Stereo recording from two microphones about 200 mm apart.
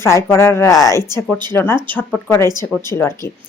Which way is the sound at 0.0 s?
15° left (ahead or behind).